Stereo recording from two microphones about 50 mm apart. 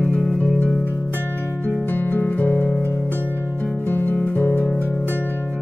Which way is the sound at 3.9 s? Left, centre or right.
Left.